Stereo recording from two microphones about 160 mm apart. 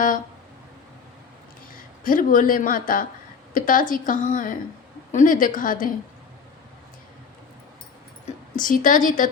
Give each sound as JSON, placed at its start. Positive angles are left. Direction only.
{"t": 2.0, "sound": "a woman's voice", "side_deg": 55}
{"t": 8.6, "sound": "a woman's voice", "side_deg": 55}